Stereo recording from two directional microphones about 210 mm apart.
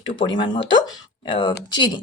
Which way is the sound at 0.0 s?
20° left (ahead or behind).